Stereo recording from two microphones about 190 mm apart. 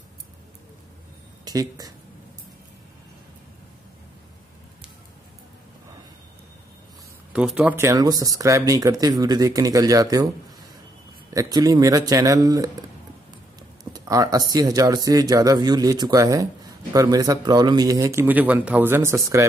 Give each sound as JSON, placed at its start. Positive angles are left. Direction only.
{"t": 1.4, "sound": "speech", "side_deg": -20}
{"t": 7.3, "sound": "speech", "side_deg": -5}
{"t": 11.2, "sound": "speech", "side_deg": -20}